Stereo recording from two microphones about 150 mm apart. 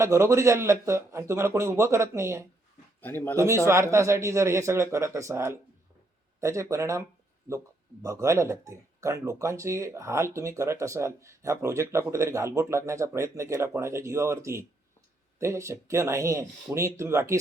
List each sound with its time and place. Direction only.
0.0 s speech: 20° right (ahead or behind)
3.0 s speech: 10° left (ahead or behind)
3.3 s speech: 20° right (ahead or behind)
8.0 s speech: 20° right (ahead or behind)